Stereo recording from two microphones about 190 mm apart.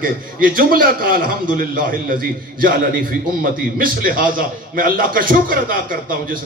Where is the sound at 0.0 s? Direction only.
50° right (ahead or behind).